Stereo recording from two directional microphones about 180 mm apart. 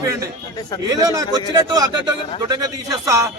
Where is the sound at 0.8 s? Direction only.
20° right (ahead or behind).